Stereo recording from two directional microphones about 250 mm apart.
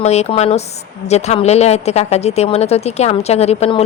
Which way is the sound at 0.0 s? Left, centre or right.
Left.